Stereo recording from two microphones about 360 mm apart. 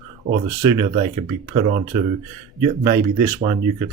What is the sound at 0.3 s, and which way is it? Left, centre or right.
Speech, centre.